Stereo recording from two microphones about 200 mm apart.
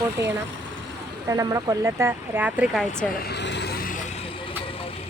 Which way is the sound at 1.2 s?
15° right (ahead or behind).